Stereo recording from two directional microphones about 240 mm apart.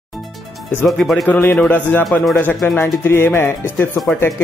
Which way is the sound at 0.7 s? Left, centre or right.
Centre.